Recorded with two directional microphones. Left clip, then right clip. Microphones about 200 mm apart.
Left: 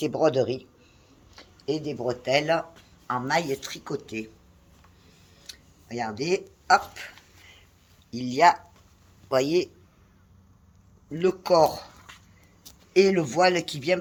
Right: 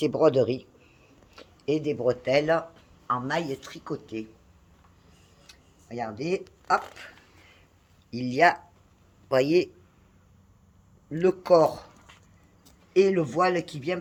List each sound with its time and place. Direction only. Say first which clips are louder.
0.0 s a man's voice: right 1 dB; 35° right (ahead or behind)
1.4 s speech: right 2 dB; 45° right (ahead or behind)
2.2 s speech: left 2 dB; 25° right (ahead or behind)
3.1 s speech: left 2 dB; 15° right (ahead or behind)
5.5 s a sound: left 4 dB; 5° right (ahead or behind); by 7.5 s 25° right (ahead or behind)
8.1 s a man's voice: left 2 dB; 35° right (ahead or behind)
11.1 s speech: right 1 dB; 30° right (ahead or behind)
12.1 s a sound: left 6 dB; 50° left (ahead or behind)
12.9 s speech: left 1 dB; 10° right (ahead or behind)